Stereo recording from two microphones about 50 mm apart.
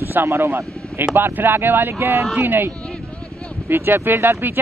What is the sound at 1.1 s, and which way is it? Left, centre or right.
Speech, right.